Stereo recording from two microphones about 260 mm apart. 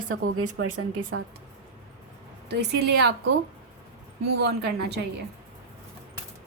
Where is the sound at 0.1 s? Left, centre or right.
Right.